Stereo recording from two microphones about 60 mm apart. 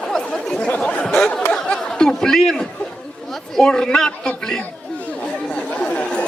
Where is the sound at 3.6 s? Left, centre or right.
Centre.